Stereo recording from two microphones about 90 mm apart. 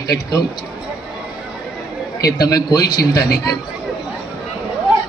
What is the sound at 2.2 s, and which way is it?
A man's voice, 45° left (ahead or behind).